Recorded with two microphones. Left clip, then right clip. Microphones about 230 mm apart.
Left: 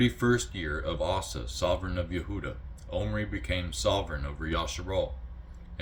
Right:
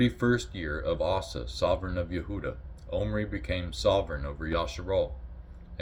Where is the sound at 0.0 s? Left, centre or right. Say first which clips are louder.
Even; centre.